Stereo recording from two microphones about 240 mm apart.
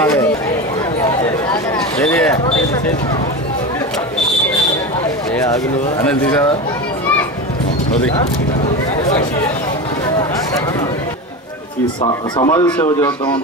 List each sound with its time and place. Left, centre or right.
2.0 s a sound: centre
12.0 s speech: centre
12.6 s a man's voice: centre